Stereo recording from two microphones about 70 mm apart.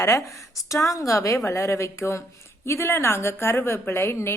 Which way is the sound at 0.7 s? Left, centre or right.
Left.